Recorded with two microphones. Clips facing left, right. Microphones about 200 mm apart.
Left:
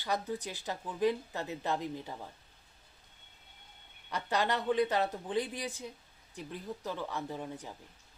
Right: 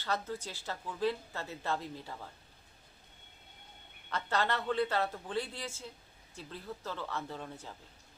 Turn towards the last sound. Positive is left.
turn(degrees=15)  # may be behind; listen again after turning